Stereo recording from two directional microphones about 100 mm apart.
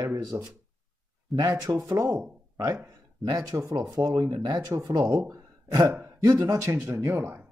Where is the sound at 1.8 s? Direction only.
30° right (ahead or behind).